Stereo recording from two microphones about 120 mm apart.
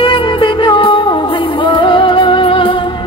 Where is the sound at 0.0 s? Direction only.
45° left (ahead or behind).